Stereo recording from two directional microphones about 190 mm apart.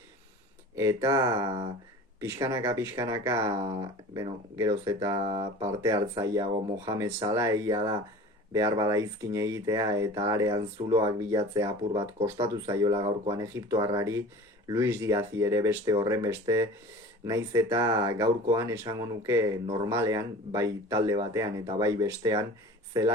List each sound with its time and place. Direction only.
0.8 s speech: 15° right (ahead or behind)